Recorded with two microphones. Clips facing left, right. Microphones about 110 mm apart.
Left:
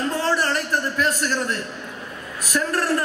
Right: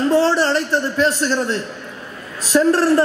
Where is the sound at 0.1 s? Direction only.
30° right (ahead or behind).